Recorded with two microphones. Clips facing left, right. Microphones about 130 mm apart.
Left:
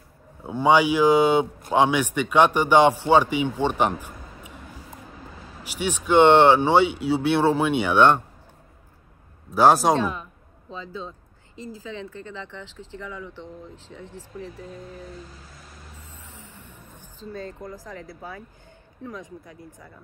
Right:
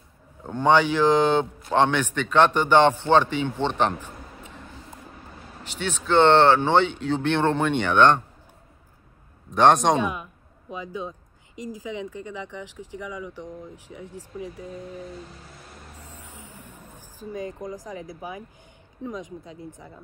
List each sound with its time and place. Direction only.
0.4 s a man's voice: 10° left (ahead or behind)
5.6 s a man's voice: 10° left (ahead or behind)
9.5 s speech: 5° left (ahead or behind)
9.9 s speech: 15° right (ahead or behind)
16.2 s a sound: 10° right (ahead or behind)
19.0 s speech: 20° right (ahead or behind)